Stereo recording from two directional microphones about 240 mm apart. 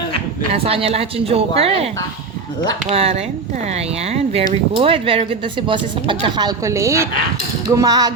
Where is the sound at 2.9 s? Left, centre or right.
Right.